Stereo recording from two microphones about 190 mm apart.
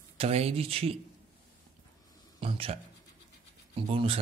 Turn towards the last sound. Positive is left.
turn(degrees=-30)  # may be behind; listen again after turning